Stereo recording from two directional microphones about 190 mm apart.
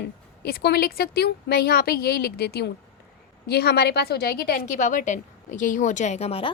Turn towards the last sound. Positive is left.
turn(degrees=30)  # may be behind; listen again after turning